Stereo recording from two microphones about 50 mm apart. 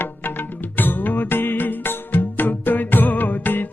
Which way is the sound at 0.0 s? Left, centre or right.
Left.